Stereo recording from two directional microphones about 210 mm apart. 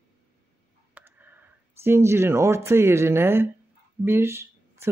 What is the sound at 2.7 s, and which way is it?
Speech, 10° right (ahead or behind).